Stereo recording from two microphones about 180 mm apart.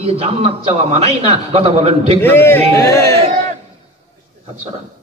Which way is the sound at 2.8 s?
20° left (ahead or behind).